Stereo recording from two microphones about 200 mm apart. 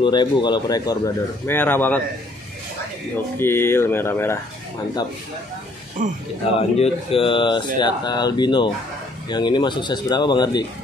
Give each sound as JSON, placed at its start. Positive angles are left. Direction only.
{"t": 0.0, "sound": "speech", "side_deg": 20}
{"t": 3.3, "sound": "speech", "side_deg": 10}
{"t": 6.0, "sound": "speech", "side_deg": -40}
{"t": 6.8, "sound": "speech", "side_deg": 25}